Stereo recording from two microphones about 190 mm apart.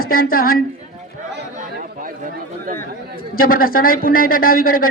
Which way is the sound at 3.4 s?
50° left (ahead or behind).